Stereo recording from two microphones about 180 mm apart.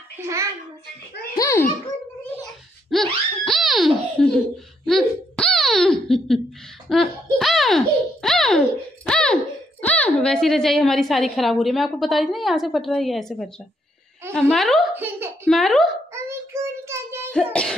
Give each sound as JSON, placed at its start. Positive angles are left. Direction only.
{"t": 0.2, "sound": "a child's voice", "side_deg": -15}
{"t": 1.4, "sound": "a child's voice", "side_deg": 15}
{"t": 2.9, "sound": "laughter", "side_deg": 0}
{"t": 4.8, "sound": "giggle", "side_deg": 5}
{"t": 6.9, "sound": "baby laughter", "side_deg": 0}
{"t": 14.5, "sound": "a woman's voice", "side_deg": 0}
{"t": 15.0, "sound": "a sound", "side_deg": -10}
{"t": 15.4, "sound": "speech", "side_deg": 0}
{"t": 16.1, "sound": "child singing", "side_deg": -15}
{"t": 17.3, "sound": "a sound", "side_deg": 5}